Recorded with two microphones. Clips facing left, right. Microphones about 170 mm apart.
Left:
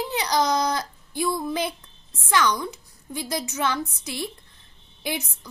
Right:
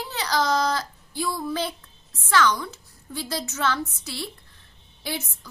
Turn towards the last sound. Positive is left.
turn(degrees=15)  # may be behind; listen again after turning